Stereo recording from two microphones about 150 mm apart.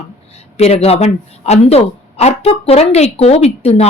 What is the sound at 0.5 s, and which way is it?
Speech, 45° left (ahead or behind).